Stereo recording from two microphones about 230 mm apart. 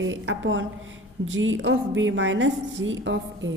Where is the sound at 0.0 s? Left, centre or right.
Right.